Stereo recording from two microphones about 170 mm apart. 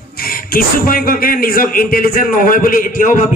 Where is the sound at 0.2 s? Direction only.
60° left (ahead or behind).